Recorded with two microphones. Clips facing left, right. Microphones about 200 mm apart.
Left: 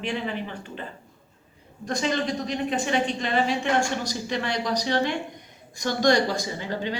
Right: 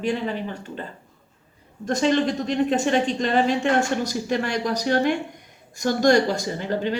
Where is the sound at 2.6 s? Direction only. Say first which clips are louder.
Right 3 dB; 45° right (ahead or behind).